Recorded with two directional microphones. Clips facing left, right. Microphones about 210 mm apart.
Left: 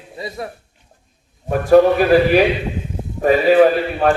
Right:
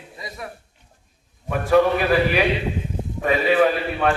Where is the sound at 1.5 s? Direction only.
40° left (ahead or behind).